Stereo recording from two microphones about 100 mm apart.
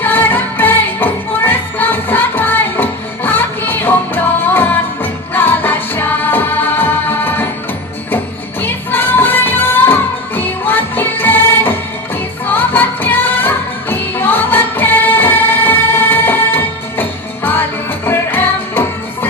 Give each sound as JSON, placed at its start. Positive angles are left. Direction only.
{"t": 0.0, "sound": "music", "side_deg": 20}
{"t": 8.6, "sound": "music", "side_deg": 20}